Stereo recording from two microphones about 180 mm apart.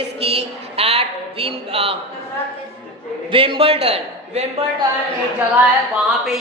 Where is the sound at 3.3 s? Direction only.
30° right (ahead or behind).